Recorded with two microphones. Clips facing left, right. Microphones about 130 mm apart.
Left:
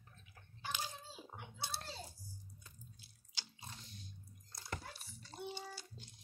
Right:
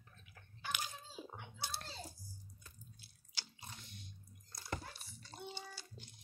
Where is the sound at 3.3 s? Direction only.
30° left (ahead or behind).